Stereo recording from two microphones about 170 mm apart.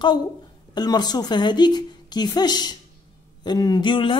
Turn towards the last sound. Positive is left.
turn(degrees=30)  # may be behind; listen again after turning